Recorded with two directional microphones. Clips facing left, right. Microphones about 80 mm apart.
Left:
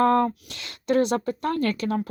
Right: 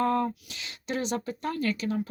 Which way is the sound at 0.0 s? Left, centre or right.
Left.